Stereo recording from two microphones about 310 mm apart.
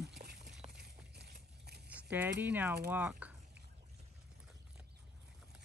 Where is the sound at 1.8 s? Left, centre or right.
Centre.